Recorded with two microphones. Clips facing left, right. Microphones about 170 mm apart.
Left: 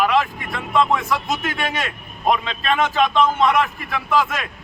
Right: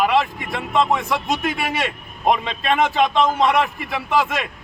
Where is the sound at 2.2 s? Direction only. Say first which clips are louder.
Right 1 dB; 20° right (ahead or behind).